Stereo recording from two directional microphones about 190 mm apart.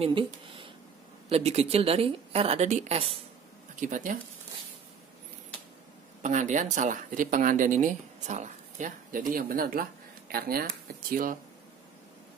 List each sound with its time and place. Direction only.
0.0 s a woman's voice: 25° right (ahead or behind)
3.8 s speech: 45° right (ahead or behind)
6.2 s speech: 40° right (ahead or behind)